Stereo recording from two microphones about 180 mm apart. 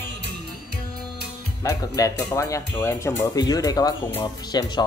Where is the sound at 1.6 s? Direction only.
20° left (ahead or behind).